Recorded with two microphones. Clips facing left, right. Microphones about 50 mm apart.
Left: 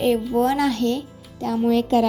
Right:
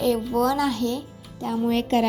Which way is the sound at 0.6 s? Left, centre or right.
Left.